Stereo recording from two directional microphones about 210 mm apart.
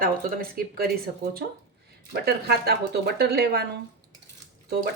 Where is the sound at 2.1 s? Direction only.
50° right (ahead or behind).